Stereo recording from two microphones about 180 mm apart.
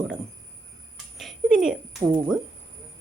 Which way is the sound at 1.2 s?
Centre (ahead or behind).